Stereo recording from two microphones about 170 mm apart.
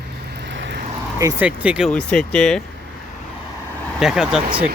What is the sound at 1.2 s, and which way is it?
Speech, 10° right (ahead or behind).